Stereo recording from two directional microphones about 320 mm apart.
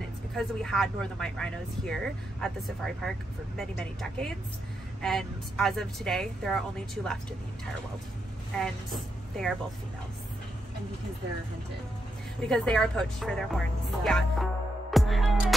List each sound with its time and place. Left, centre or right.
0.3 s speech: centre
8.5 s speech: centre
12.4 s speech: centre